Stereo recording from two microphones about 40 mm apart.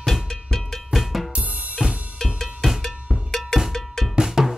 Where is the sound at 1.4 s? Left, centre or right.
Right.